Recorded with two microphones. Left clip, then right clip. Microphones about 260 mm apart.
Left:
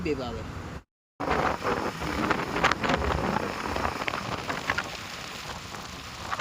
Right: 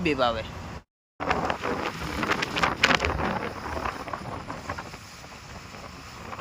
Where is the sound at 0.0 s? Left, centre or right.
Centre.